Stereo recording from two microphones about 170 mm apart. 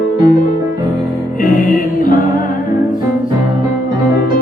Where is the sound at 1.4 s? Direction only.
55° left (ahead or behind).